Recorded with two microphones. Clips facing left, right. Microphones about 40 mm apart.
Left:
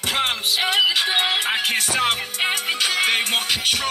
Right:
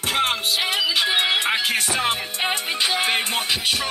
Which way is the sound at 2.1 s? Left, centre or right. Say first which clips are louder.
Left 1 dB; left.